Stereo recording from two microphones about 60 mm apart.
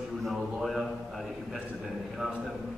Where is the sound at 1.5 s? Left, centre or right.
Centre.